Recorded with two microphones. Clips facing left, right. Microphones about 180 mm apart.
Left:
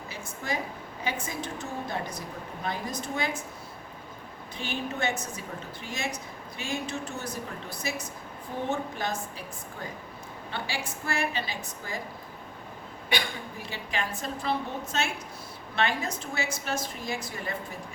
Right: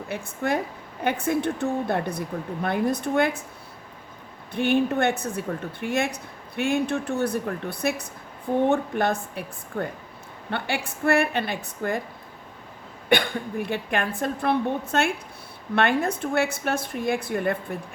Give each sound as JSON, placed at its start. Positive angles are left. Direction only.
{"t": 0.1, "sound": "a woman's voice", "side_deg": -60}
{"t": 4.5, "sound": "a woman's voice", "side_deg": -60}
{"t": 13.1, "sound": "a woman's voice", "side_deg": -55}